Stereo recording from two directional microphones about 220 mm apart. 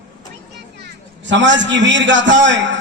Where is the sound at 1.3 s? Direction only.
55° right (ahead or behind).